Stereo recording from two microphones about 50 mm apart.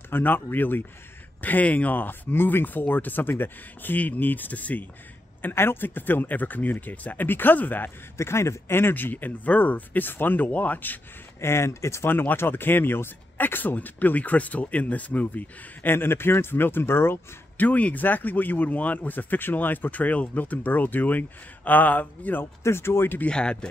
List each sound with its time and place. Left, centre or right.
0.1 s speech: left
5.4 s speech: left
8.2 s a man's voice: left
8.9 s speech: left
11.4 s speech: left
12.1 s speech: left
15.9 s speech: left
17.6 s speech: left
22.6 s a man's voice: left
23.2 s speech: left